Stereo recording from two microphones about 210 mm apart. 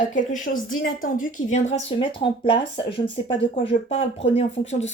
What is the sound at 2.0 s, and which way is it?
A woman's voice, 25° left (ahead or behind).